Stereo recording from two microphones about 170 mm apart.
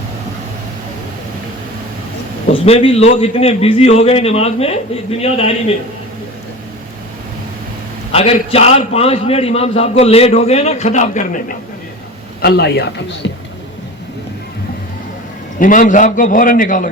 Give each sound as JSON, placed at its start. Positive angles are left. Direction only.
{"t": 2.5, "sound": "a man's voice", "side_deg": 35}
{"t": 8.1, "sound": "a man's voice", "side_deg": 35}
{"t": 12.4, "sound": "a man's voice", "side_deg": 70}
{"t": 15.5, "sound": "a man's voice", "side_deg": 50}